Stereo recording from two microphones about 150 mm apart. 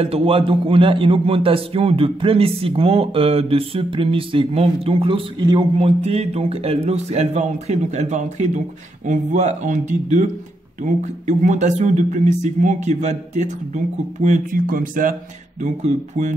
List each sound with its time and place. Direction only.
0.0 s a man's voice: 40° right (ahead or behind); by 15.1 s 65° right (ahead or behind)
15.6 s speech: 50° right (ahead or behind)